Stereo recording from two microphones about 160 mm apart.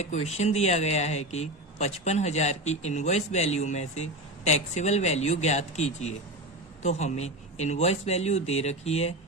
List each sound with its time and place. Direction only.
0.0 s a man's voice: 45° left (ahead or behind)